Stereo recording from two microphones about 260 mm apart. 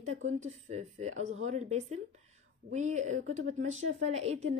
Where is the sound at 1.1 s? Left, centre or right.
Right.